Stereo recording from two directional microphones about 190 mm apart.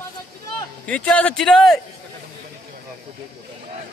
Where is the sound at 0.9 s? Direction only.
5° left (ahead or behind).